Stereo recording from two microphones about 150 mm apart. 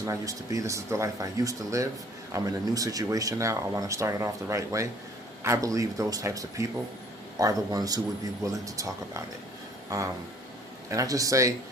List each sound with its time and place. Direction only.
0.0 s speech: 20° right (ahead or behind)